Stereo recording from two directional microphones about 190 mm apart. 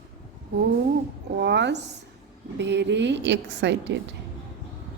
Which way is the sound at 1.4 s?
65° right (ahead or behind).